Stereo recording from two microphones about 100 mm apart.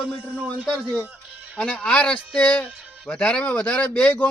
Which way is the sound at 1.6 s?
15° left (ahead or behind).